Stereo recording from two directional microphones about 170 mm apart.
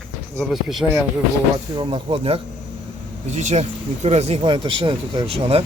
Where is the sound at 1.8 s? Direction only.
30° right (ahead or behind).